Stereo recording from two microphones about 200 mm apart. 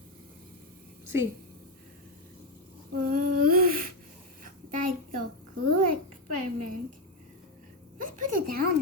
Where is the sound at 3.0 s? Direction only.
45° right (ahead or behind).